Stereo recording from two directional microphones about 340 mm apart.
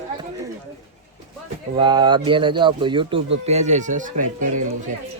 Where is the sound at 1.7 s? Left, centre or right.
Centre.